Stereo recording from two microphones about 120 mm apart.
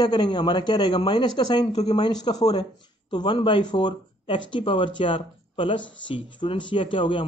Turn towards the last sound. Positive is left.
turn(degrees=45)  # may be behind; listen again after turning